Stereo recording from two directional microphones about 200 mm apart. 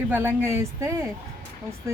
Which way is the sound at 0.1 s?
10° right (ahead or behind).